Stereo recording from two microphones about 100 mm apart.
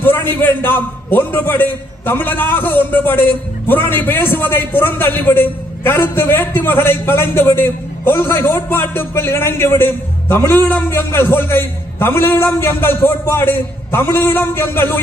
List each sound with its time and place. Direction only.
0.0 s a man's voice: 20° left (ahead or behind)